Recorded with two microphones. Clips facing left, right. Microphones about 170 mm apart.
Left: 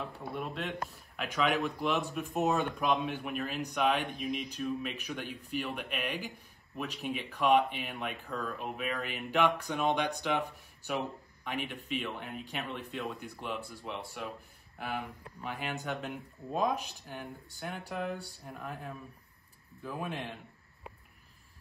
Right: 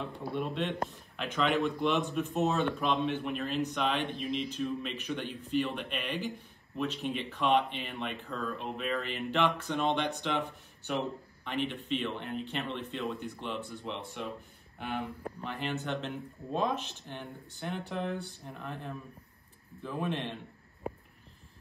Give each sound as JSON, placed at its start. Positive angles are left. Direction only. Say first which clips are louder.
{"t": 0.0, "sound": "speech", "louder": "right 3 dB", "side_deg": 0}